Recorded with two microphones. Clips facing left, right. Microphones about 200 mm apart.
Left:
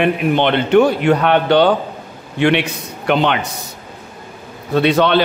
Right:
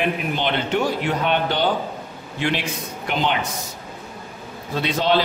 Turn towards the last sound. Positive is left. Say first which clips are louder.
# left 7 dB
turn(degrees=65)  # may be behind; listen again after turning